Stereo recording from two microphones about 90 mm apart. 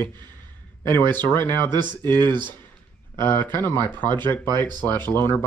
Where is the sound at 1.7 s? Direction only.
55° right (ahead or behind).